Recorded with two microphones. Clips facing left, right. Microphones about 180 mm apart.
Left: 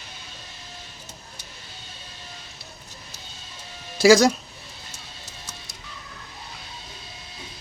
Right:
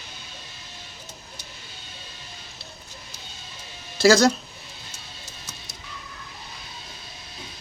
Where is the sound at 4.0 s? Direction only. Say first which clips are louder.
Left 2 dB; 15° left (ahead or behind).